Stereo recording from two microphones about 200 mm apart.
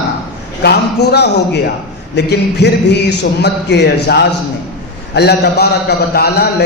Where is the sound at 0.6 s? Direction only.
55° left (ahead or behind).